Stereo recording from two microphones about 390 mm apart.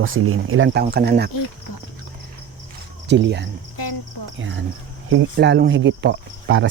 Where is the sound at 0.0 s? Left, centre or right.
Right.